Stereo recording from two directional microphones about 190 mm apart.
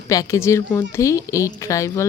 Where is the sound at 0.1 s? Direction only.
15° left (ahead or behind).